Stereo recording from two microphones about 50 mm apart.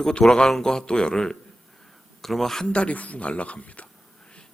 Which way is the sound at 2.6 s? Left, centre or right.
Left.